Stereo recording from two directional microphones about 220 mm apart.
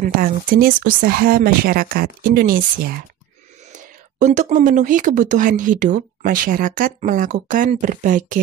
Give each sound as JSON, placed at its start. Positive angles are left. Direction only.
{"t": 0.0, "sound": "speech", "side_deg": -40}